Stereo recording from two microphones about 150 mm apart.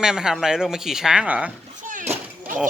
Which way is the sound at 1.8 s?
60° right (ahead or behind).